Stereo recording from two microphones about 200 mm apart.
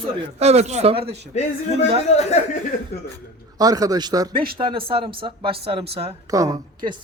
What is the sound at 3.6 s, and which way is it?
Speech, 20° right (ahead or behind).